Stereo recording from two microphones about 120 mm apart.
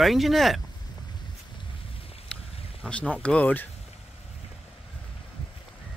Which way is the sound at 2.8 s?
10° left (ahead or behind).